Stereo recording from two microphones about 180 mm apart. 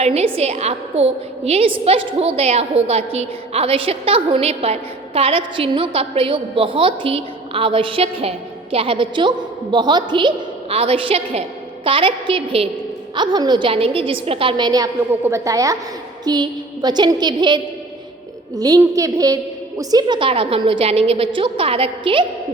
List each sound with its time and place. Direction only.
0.0 s a woman's voice: 35° right (ahead or behind)